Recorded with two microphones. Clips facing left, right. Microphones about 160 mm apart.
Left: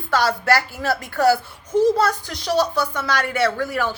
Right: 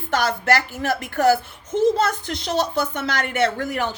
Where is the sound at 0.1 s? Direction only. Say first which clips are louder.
Left 1 dB; 20° right (ahead or behind).